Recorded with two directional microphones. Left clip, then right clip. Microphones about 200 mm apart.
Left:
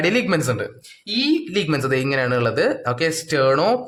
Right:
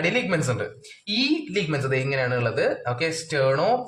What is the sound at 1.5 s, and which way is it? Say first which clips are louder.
Speech: left 4 dB; 30° left (ahead or behind).